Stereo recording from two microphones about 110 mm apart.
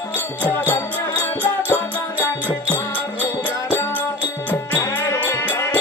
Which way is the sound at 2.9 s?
15° left (ahead or behind).